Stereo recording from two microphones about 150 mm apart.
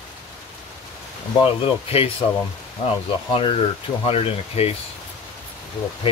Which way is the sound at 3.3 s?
35° left (ahead or behind).